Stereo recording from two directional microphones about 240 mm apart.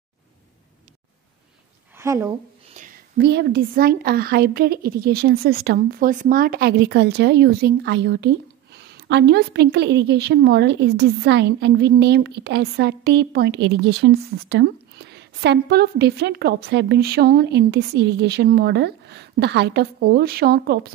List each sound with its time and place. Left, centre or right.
2.0 s a woman's voice: centre
2.7 s a sound: right
3.3 s a woman's voice: right